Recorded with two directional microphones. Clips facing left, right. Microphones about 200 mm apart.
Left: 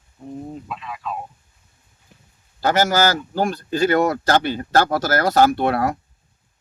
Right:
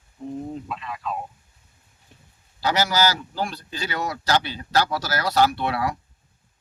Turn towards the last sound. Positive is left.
turn(degrees=50)  # may be behind; listen again after turning